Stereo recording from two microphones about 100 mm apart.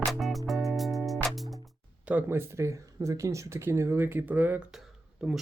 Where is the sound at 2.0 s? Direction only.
20° right (ahead or behind).